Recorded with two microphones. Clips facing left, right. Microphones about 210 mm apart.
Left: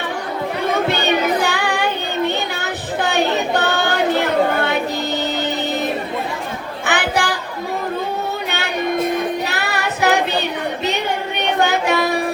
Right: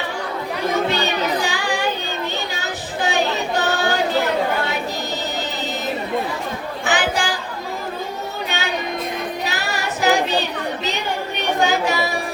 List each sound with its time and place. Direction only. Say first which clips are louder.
1.4 s music: left 3 dB; 60° left (ahead or behind)
6.8 s chatter: left 2 dB; 60° left (ahead or behind)
9.5 s music: left 2 dB; 60° left (ahead or behind)
11.6 s music: left 2 dB; 60° left (ahead or behind)